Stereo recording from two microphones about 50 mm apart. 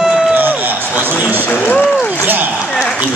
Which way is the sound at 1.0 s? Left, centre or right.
Right.